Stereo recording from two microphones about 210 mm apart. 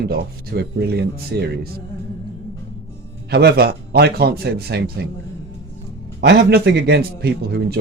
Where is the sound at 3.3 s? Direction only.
50° right (ahead or behind).